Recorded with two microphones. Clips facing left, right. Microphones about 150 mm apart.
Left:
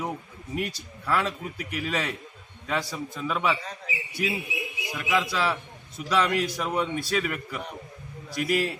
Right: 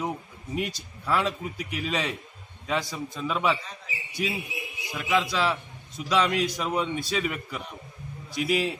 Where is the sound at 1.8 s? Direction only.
15° right (ahead or behind).